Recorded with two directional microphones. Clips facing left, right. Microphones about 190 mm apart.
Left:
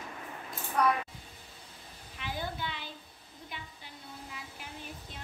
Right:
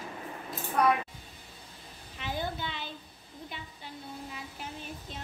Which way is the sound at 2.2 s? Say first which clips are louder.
Right 3 dB; 25° right (ahead or behind).